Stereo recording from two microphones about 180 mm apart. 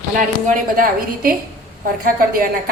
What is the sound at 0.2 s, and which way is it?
A woman's voice, 50° right (ahead or behind).